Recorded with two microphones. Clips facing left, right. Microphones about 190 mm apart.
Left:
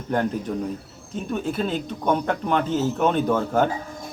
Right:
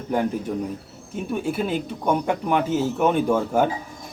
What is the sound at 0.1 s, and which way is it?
Speech, 10° right (ahead or behind).